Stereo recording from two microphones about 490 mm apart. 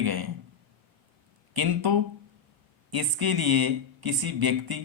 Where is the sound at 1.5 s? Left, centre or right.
Right.